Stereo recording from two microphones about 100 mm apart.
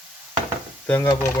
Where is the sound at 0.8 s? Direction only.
15° left (ahead or behind).